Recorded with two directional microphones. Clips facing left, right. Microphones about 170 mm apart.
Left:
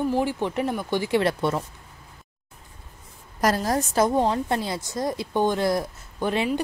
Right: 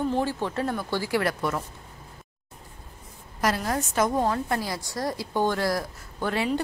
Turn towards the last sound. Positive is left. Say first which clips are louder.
# left 2 dB
turn(degrees=20)  # may be behind; listen again after turning